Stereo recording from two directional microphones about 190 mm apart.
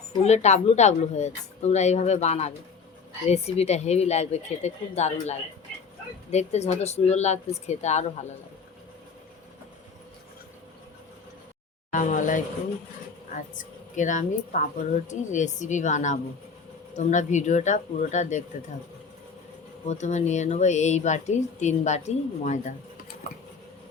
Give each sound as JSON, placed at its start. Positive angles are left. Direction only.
{"t": 0.2, "sound": "speech", "side_deg": 35}
{"t": 11.9, "sound": "speech", "side_deg": 45}
{"t": 19.8, "sound": "speech", "side_deg": 40}